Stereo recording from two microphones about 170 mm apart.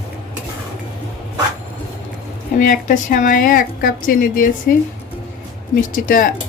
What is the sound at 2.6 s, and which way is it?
Speech, 50° left (ahead or behind).